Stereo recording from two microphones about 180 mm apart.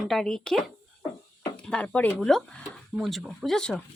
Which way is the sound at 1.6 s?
5° left (ahead or behind).